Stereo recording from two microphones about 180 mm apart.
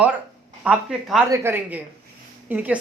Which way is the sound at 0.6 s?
Centre (ahead or behind).